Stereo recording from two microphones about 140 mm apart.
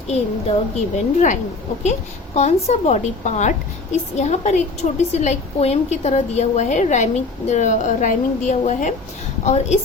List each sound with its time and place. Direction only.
0.9 s a woman's voice: 65° left (ahead or behind)